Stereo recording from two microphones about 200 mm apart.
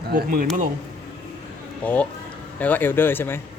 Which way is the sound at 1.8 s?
5° left (ahead or behind).